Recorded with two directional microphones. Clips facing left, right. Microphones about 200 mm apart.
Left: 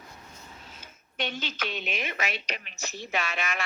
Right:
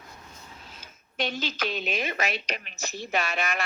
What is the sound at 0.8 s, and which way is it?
A woman's voice, 35° right (ahead or behind).